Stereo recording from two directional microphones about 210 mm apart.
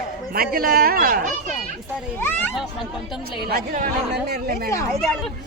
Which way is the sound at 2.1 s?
10° left (ahead or behind).